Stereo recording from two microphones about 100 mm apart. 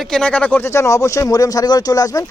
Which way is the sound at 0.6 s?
30° left (ahead or behind).